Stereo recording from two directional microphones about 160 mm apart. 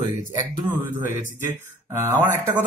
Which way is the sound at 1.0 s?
15° right (ahead or behind).